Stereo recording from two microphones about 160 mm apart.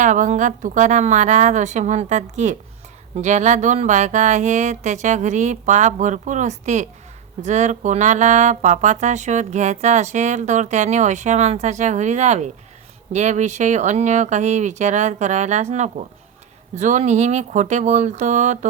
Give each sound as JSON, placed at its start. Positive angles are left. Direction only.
{"t": 0.0, "sound": "speech", "side_deg": -50}